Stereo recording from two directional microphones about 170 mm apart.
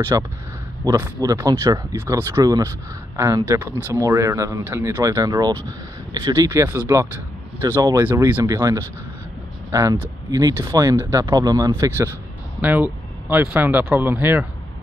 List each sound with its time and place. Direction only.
0.1 s speech: 20° right (ahead or behind)